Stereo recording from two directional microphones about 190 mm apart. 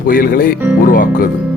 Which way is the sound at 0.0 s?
50° left (ahead or behind).